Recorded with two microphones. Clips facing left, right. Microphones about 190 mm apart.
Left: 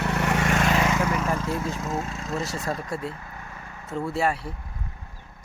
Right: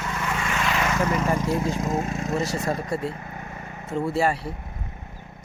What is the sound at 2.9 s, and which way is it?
Speech, centre (ahead or behind).